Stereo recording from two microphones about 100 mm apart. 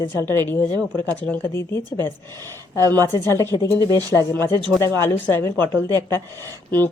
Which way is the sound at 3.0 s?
25° left (ahead or behind).